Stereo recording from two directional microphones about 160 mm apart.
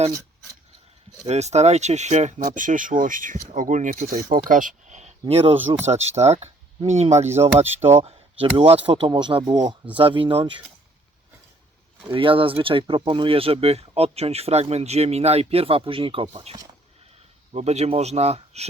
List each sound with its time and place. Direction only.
1.2 s speech: 45° right (ahead or behind)
12.1 s speech: 35° right (ahead or behind)